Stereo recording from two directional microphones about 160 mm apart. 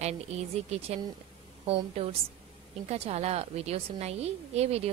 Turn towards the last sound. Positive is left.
turn(degrees=-40)  # may be behind; listen again after turning